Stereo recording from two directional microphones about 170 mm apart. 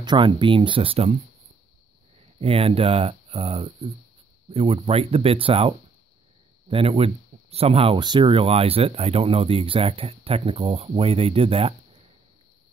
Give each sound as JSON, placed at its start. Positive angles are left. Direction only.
{"t": 0.0, "sound": "speech", "side_deg": -30}
{"t": 2.4, "sound": "speech", "side_deg": -35}